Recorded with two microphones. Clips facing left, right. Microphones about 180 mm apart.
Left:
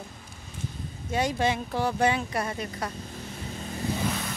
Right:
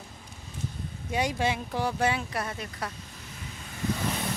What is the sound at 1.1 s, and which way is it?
Speech, 10° right (ahead or behind).